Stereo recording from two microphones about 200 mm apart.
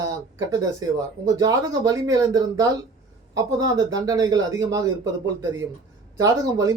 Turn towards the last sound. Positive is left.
turn(degrees=-15)  # may be behind; listen again after turning